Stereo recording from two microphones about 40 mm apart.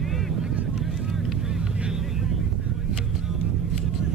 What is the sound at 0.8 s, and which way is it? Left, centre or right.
Boat, centre.